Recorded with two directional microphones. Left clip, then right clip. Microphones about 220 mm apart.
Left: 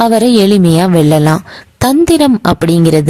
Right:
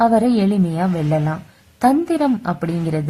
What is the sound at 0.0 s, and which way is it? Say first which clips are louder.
A woman's voice: left 7 dB; 40° left (ahead or behind).